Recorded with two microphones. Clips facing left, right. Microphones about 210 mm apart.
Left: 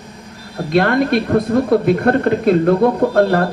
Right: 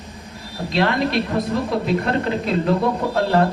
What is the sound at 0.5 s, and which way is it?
Speech, 55° left (ahead or behind).